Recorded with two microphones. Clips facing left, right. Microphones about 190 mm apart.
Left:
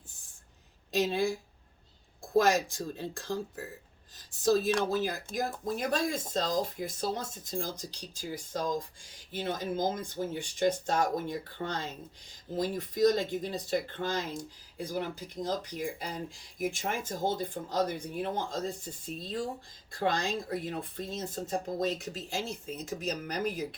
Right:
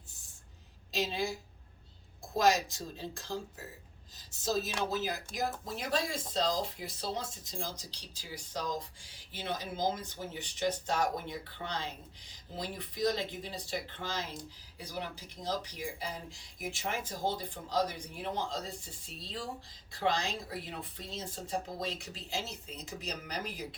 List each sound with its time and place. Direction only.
1.0 s speech: 55° left (ahead or behind)
4.9 s speech: 50° left (ahead or behind)